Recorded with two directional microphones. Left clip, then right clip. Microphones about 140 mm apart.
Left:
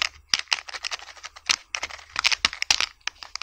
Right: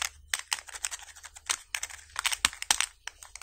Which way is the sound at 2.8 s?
20° left (ahead or behind).